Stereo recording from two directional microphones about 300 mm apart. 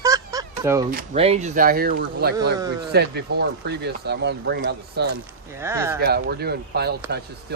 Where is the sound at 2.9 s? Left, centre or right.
Right.